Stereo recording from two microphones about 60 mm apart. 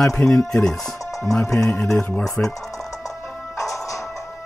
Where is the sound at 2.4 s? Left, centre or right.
Left.